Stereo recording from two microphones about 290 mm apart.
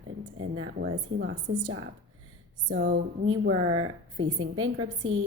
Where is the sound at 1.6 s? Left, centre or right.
Right.